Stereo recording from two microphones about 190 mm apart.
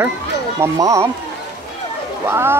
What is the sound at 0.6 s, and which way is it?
Speech, 15° right (ahead or behind).